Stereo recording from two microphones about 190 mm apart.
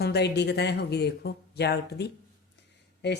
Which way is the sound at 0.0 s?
60° left (ahead or behind).